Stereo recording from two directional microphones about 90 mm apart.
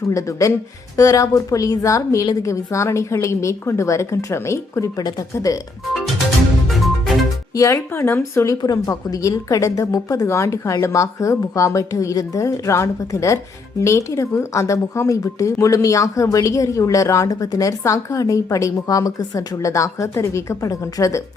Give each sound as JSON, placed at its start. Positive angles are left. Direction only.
{"t": 0.1, "sound": "speech", "side_deg": 35}
{"t": 4.9, "sound": "speech", "side_deg": 45}
{"t": 6.7, "sound": "music", "side_deg": 0}
{"t": 7.5, "sound": "speech", "side_deg": 35}